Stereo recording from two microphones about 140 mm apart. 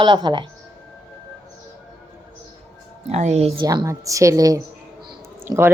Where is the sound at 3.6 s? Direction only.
25° right (ahead or behind).